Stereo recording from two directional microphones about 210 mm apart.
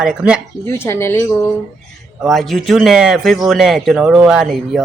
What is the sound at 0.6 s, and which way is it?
Speech, 10° left (ahead or behind).